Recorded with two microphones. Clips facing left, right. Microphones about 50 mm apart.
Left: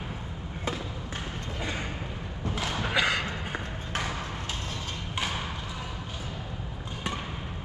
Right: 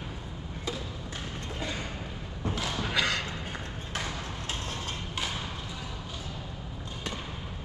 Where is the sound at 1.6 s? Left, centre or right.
Left.